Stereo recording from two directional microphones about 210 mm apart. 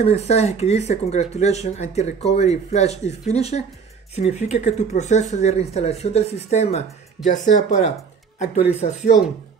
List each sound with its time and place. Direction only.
0.0 s speech: 30° left (ahead or behind)